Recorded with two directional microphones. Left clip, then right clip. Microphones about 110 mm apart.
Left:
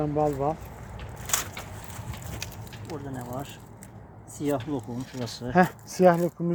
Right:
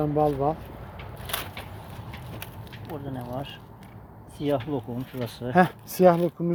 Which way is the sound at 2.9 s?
40° right (ahead or behind).